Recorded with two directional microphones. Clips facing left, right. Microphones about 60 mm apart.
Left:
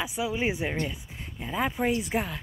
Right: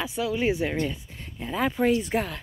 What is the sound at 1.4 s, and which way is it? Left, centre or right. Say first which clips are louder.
Speech: right 3 dB; centre.